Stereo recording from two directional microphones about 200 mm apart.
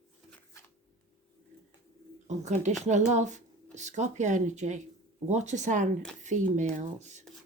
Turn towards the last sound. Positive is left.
turn(degrees=-35)  # may be behind; listen again after turning